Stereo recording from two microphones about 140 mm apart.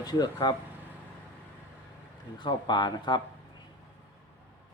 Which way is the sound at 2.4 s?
35° left (ahead or behind).